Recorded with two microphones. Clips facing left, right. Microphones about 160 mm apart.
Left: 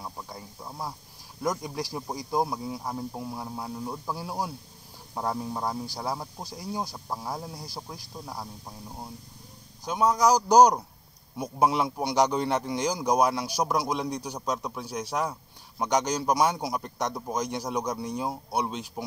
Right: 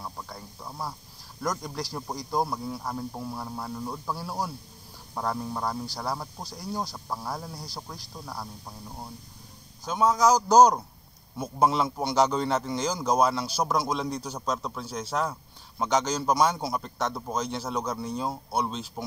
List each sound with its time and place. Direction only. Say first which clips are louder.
0.0 s snake: even; 10° left (ahead or behind)
1.7 s a man's voice: left 1 dB; 15° left (ahead or behind)
6.3 s speech: even; 5° left (ahead or behind)
6.7 s a man's voice: even; 15° left (ahead or behind)
9.8 s a man's voice: even; 10° left (ahead or behind)